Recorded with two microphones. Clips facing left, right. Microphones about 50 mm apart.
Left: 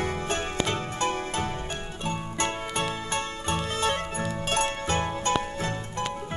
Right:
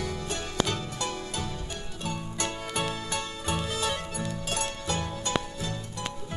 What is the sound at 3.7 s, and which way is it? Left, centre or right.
Music, left.